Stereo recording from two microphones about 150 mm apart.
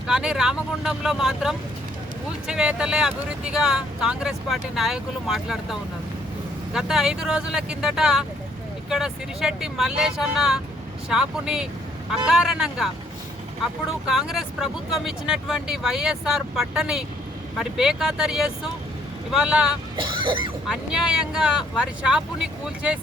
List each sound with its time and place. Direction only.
0.1 s speech: 5° right (ahead or behind)
6.7 s speech: 5° right (ahead or behind)
14.1 s speech: 5° right (ahead or behind)
20.0 s speech: 35° right (ahead or behind)
20.7 s speech: 5° right (ahead or behind)